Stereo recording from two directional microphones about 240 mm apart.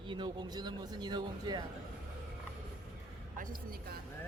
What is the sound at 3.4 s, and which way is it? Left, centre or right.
Speech, right.